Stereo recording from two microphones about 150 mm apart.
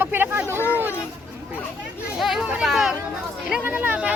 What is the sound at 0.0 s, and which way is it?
Speech, 15° right (ahead or behind).